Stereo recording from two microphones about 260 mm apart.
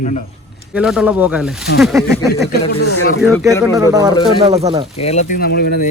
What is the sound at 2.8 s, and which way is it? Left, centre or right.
Speech, left.